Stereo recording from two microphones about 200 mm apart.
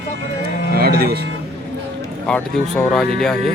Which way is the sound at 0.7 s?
50° right (ahead or behind).